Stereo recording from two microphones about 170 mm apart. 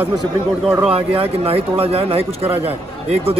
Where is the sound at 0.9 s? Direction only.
35° right (ahead or behind).